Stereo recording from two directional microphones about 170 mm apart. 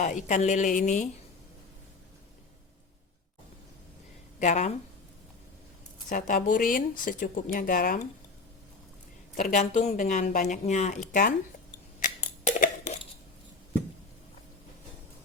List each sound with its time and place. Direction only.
0.0 s speech: 45° left (ahead or behind)
4.4 s a woman's voice: 45° left (ahead or behind)
6.1 s speech: 50° left (ahead or behind)
9.3 s speech: 45° left (ahead or behind)
12.5 s a sound: 45° left (ahead or behind)